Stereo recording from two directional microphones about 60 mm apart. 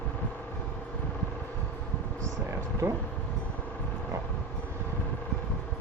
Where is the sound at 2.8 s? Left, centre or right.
Right.